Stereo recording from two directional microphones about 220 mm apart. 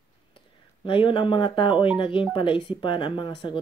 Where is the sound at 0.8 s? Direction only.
20° left (ahead or behind).